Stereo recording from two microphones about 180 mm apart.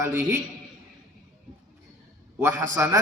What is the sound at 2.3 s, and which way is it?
Speech, 15° right (ahead or behind).